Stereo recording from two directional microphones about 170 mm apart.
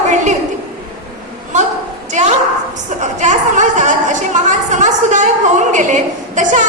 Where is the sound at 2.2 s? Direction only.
45° right (ahead or behind).